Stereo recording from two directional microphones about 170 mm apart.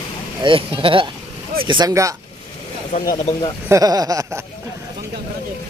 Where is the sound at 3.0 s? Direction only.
25° left (ahead or behind).